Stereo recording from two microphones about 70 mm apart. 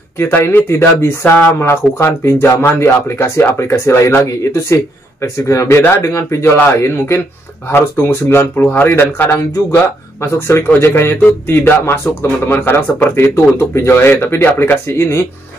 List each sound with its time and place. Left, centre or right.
0.2 s speech: left
11.1 s a sound: left
11.8 s speech: left